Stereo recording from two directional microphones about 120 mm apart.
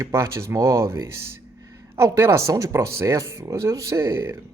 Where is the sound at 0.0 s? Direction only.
20° right (ahead or behind).